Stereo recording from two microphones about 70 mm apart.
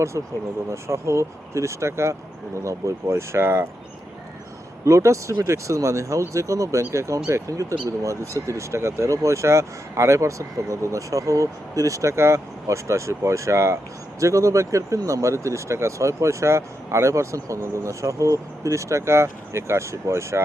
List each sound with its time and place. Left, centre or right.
0.7 s speech: right
4.9 s speech: right